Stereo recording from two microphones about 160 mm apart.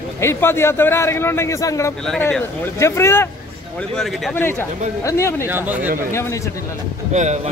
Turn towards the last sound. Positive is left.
turn(degrees=-45)  # may be behind; listen again after turning